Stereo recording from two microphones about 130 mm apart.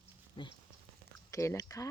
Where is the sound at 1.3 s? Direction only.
25° left (ahead or behind).